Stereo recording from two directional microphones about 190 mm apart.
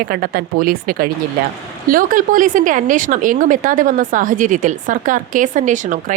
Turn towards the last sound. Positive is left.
turn(degrees=-40)  # may be behind; listen again after turning